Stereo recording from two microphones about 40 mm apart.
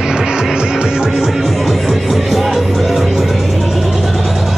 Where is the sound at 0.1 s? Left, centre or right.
Centre.